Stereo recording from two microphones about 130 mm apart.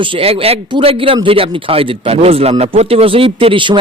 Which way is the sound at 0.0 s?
45° right (ahead or behind).